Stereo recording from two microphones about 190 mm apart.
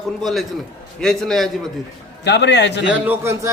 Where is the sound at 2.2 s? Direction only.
65° left (ahead or behind).